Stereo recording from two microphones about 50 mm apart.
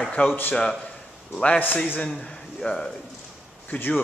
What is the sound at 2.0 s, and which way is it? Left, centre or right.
Speech, centre.